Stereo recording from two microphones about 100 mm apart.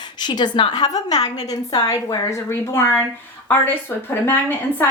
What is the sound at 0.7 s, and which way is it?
A woman's voice, 40° left (ahead or behind).